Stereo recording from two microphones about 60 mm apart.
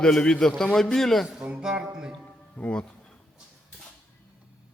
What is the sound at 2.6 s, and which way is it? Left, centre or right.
Speech, centre.